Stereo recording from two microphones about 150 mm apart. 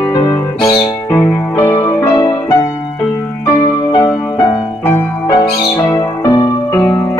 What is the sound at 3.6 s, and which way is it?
Music, 25° left (ahead or behind).